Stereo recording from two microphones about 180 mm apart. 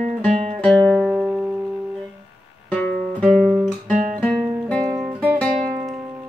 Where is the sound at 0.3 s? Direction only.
35° right (ahead or behind).